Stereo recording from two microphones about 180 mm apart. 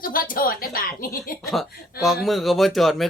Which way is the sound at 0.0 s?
50° left (ahead or behind).